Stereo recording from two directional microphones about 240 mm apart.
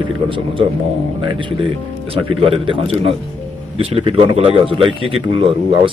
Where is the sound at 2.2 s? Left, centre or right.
Right.